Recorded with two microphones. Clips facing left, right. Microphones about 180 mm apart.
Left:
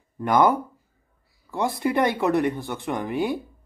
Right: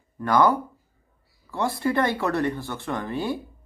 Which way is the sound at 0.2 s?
20° left (ahead or behind).